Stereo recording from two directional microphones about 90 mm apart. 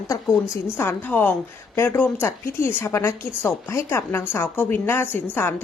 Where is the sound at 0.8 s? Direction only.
20° left (ahead or behind).